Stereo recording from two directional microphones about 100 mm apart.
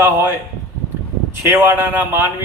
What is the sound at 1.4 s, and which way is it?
Speech, 25° right (ahead or behind).